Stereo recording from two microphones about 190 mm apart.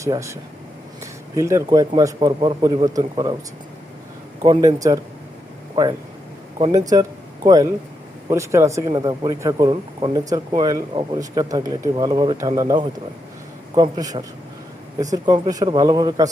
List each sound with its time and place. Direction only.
0.0 s a man's voice: 15° right (ahead or behind)
1.4 s speech: 15° right (ahead or behind)
4.4 s a man's voice: 20° right (ahead or behind)
6.9 s a man's voice: 20° right (ahead or behind)